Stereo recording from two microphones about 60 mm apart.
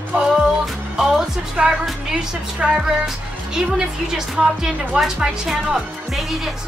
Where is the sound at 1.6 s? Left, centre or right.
Centre.